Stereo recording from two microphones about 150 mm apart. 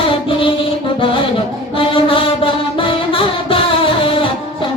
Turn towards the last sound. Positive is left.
turn(degrees=35)  # may be behind; listen again after turning